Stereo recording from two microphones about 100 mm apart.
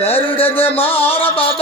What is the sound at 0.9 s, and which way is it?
Music, 70° left (ahead or behind).